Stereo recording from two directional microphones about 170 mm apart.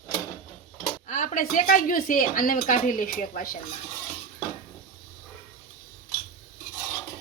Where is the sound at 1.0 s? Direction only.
50° left (ahead or behind).